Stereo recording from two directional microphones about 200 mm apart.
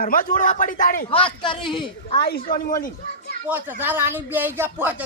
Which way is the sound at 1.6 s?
Centre (ahead or behind).